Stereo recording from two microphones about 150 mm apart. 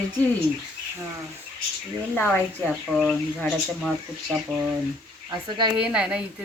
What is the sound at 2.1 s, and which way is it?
Speech, 10° left (ahead or behind).